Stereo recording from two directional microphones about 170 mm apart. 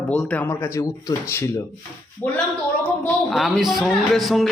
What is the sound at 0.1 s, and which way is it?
Speech, 5° left (ahead or behind).